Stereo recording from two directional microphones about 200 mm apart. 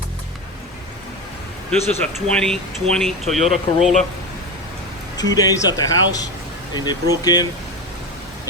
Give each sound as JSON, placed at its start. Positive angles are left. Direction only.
{"t": 2.0, "sound": "speech", "side_deg": 5}
{"t": 5.1, "sound": "speech", "side_deg": 20}